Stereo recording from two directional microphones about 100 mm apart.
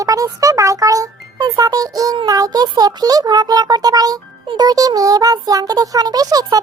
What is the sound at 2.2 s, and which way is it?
A child's voice, 35° right (ahead or behind).